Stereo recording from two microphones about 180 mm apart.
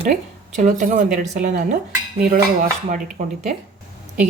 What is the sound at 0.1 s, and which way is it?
Speech, 45° right (ahead or behind).